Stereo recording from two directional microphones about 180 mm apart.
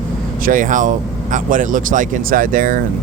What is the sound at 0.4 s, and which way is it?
Speech, 45° right (ahead or behind).